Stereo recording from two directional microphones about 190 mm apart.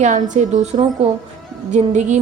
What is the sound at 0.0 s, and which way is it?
A woman's voice, 40° right (ahead or behind).